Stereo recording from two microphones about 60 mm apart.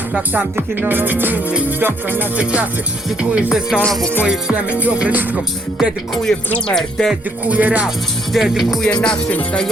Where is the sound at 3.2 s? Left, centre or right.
Centre.